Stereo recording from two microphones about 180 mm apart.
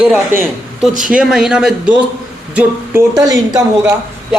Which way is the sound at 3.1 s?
20° right (ahead or behind).